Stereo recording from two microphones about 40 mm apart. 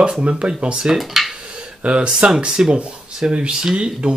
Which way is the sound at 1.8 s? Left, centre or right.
Right.